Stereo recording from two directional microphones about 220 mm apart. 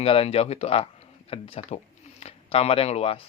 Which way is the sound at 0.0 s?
25° left (ahead or behind).